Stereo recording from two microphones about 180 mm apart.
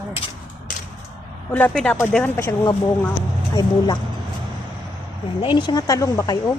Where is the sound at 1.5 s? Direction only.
10° left (ahead or behind).